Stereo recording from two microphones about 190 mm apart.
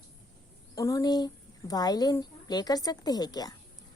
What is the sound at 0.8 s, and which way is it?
A woman's voice, 15° left (ahead or behind).